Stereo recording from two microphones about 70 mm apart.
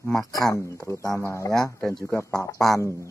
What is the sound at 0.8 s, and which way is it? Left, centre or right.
Speech, left.